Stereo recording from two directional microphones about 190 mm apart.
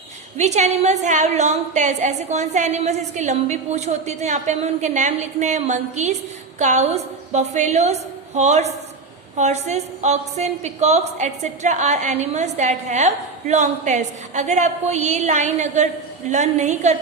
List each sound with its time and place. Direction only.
0.3 s a woman's voice: 35° right (ahead or behind)